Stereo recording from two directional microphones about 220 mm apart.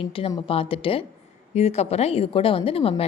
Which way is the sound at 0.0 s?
25° left (ahead or behind).